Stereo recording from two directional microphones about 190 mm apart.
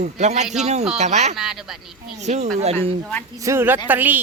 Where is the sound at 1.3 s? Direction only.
Centre (ahead or behind).